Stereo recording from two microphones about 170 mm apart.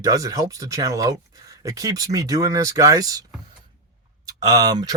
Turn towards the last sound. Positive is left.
turn(degrees=-20)  # may be behind; listen again after turning